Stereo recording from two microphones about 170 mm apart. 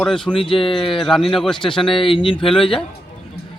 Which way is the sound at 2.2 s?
30° left (ahead or behind).